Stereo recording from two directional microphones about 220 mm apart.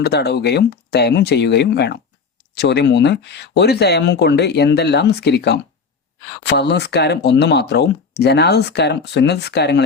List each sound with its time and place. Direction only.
0.0 s speech: 50° left (ahead or behind)